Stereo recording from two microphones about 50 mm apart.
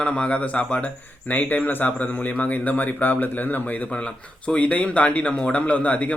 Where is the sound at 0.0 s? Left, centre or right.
Left.